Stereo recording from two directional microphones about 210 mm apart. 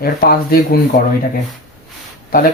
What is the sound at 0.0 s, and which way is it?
Speech, 45° left (ahead or behind).